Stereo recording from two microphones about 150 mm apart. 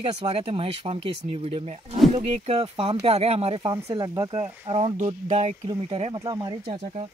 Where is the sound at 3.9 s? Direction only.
25° right (ahead or behind).